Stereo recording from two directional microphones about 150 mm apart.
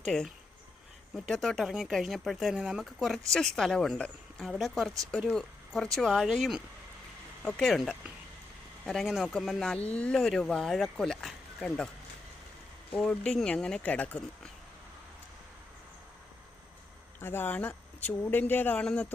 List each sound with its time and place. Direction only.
0.0 s speech: centre (ahead or behind)
13.0 s speech: 5° left (ahead or behind)
17.2 s speech: 15° left (ahead or behind)